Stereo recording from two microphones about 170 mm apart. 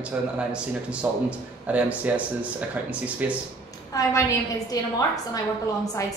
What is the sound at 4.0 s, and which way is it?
Speech, 20° left (ahead or behind).